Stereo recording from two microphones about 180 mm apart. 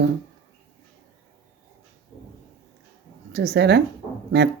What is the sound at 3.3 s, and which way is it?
Speech, 70° right (ahead or behind).